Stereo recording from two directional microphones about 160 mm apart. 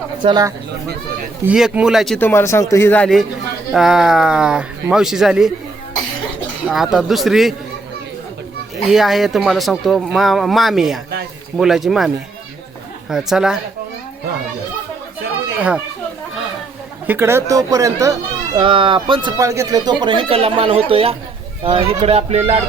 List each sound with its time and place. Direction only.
0.2 s speech: 25° right (ahead or behind)
1.5 s speech: 5° right (ahead or behind)
2.1 s speech: 15° left (ahead or behind); by 5.5 s 5° right (ahead or behind)
6.7 s speech: 5° right (ahead or behind)
8.9 s speech: centre (ahead or behind)
17.1 s speech: 15° right (ahead or behind); by 19.3 s 30° right (ahead or behind)
19.4 s speech: 20° right (ahead or behind); by 22.6 s 40° right (ahead or behind)